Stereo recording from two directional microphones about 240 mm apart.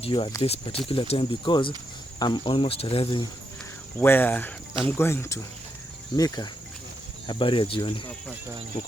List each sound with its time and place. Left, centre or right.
0.0 s speech: left
4.0 s speech: centre